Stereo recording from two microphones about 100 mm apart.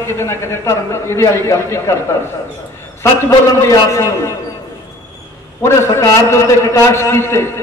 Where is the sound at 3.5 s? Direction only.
30° left (ahead or behind).